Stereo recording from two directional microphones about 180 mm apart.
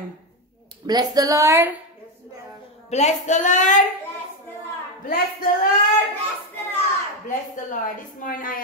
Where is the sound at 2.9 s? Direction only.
40° left (ahead or behind).